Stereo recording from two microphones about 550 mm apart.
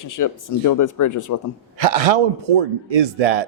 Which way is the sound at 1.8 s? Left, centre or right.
Right.